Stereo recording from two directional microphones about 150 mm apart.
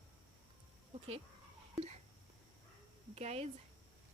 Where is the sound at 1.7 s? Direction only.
45° right (ahead or behind).